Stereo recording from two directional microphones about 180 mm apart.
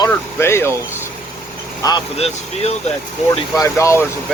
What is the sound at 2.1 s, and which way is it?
Speech, 35° left (ahead or behind).